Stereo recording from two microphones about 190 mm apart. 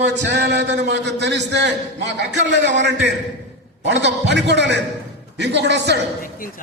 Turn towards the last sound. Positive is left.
turn(degrees=-65)  # may be behind; listen again after turning